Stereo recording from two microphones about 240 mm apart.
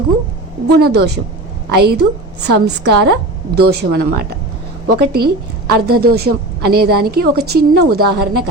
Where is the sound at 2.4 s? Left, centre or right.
Right.